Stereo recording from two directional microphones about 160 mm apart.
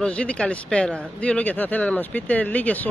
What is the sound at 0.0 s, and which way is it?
Speech, 5° left (ahead or behind).